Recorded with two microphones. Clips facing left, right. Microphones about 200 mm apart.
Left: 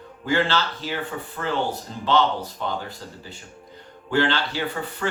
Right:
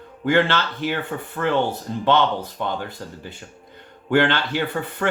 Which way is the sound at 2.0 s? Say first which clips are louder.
Right 2 dB; 55° right (ahead or behind).